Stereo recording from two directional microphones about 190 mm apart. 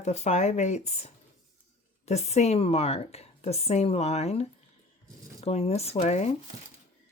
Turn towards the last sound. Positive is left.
turn(degrees=35)  # may be behind; listen again after turning